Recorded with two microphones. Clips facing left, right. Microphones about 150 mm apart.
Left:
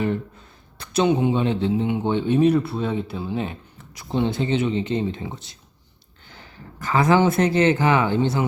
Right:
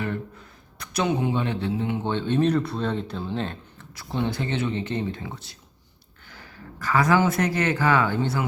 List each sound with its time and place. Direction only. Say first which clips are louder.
0.0 s speech: left 5 dB; 25° left (ahead or behind)
6.7 s speech: left 3 dB; 20° left (ahead or behind)